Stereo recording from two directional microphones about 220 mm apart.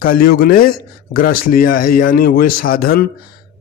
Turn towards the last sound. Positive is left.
turn(degrees=40)  # may be behind; listen again after turning